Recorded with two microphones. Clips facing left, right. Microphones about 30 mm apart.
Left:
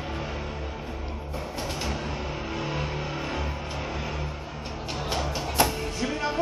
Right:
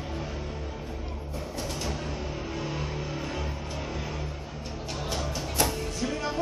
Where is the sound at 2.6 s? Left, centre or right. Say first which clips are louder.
Left 4 dB; centre.